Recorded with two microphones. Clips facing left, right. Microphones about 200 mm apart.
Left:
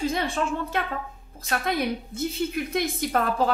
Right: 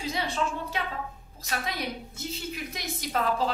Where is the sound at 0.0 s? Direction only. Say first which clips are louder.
Left 4 dB; 50° left (ahead or behind).